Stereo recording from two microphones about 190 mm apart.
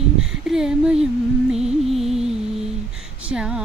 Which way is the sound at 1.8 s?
Centre (ahead or behind).